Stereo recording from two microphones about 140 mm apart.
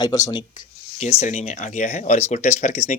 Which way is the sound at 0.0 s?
30° left (ahead or behind).